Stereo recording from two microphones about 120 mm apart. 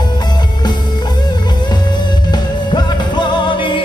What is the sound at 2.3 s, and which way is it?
Music, 35° left (ahead or behind).